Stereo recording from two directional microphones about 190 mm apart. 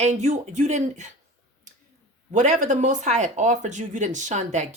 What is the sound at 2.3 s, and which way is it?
Speech, 40° right (ahead or behind).